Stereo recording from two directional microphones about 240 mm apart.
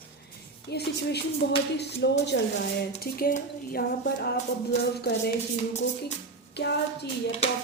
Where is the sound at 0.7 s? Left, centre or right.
Left.